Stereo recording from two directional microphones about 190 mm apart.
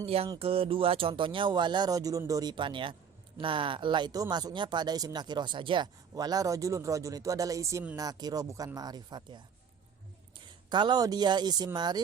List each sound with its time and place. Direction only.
0.0 s speech: 30° right (ahead or behind)